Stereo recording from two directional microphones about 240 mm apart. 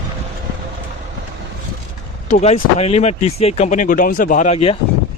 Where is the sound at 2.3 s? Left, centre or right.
Left.